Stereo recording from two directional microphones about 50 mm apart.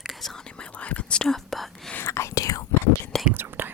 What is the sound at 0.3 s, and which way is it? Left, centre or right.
Whispering, centre.